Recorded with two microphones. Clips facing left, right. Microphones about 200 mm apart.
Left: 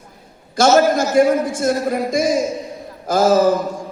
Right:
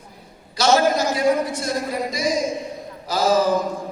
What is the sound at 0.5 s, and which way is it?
A man's voice, 50° left (ahead or behind).